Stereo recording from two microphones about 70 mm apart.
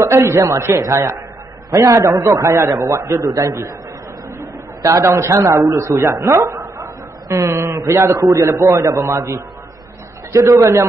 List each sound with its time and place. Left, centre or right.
0.0 s a man's voice: right
4.8 s a man's voice: right